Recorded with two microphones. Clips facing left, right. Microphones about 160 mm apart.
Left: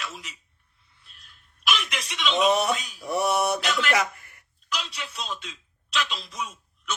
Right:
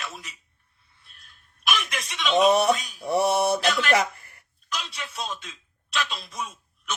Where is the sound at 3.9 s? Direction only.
30° right (ahead or behind).